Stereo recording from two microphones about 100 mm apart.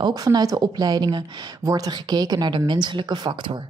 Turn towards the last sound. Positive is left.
turn(degrees=-45)  # may be behind; listen again after turning